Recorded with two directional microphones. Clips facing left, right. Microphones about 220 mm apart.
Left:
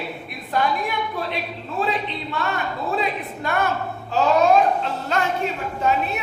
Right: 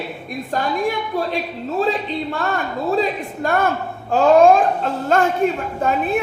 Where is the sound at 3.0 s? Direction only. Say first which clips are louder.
Right 5 dB; 45° right (ahead or behind).